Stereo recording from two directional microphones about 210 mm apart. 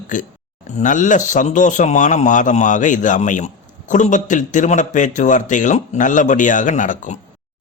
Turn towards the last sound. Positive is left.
turn(degrees=35)  # may be behind; listen again after turning